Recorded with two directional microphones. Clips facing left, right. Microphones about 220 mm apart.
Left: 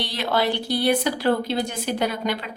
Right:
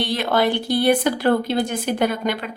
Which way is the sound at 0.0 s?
50° right (ahead or behind).